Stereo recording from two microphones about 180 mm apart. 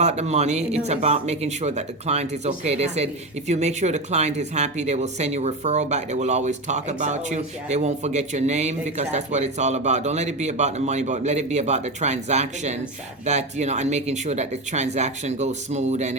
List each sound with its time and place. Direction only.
0.0 s speech: 40° right (ahead or behind)